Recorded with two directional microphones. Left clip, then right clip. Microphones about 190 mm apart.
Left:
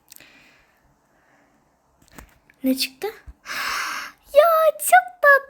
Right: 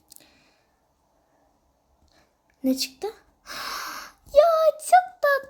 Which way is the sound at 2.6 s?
5° right (ahead or behind).